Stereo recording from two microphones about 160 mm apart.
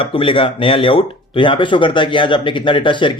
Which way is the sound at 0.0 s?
35° left (ahead or behind).